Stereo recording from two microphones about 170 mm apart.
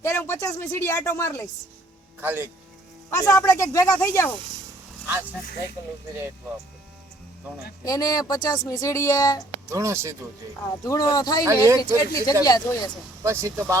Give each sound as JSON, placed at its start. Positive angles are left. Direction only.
{"t": 0.0, "sound": "speech", "side_deg": 15}
{"t": 2.2, "sound": "speech", "side_deg": -10}
{"t": 3.1, "sound": "speech", "side_deg": 20}
{"t": 7.9, "sound": "speech", "side_deg": 20}
{"t": 9.6, "sound": "speech", "side_deg": -15}
{"t": 10.8, "sound": "speech", "side_deg": 20}
{"t": 11.4, "sound": "speech", "side_deg": -15}
{"t": 11.8, "sound": "speech", "side_deg": 20}
{"t": 13.2, "sound": "speech", "side_deg": -15}